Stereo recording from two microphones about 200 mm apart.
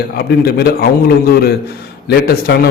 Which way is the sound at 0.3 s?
50° left (ahead or behind).